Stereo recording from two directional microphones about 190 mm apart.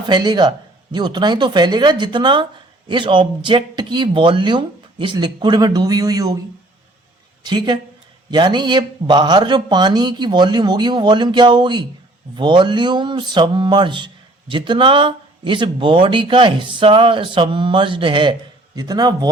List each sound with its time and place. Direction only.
0.1 s speech: 20° right (ahead or behind)
7.4 s speech: 20° right (ahead or behind)